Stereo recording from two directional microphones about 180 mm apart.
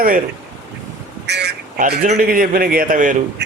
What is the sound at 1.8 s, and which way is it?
Speech, 45° right (ahead or behind).